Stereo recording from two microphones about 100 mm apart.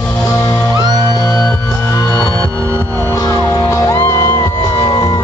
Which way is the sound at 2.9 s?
20° left (ahead or behind).